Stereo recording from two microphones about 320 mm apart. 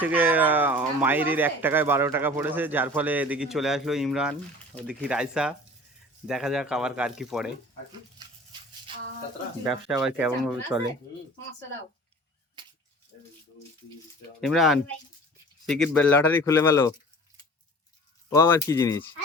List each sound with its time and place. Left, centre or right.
0.0 s speech: centre
9.6 s speech: centre
14.4 s speech: centre
18.3 s speech: centre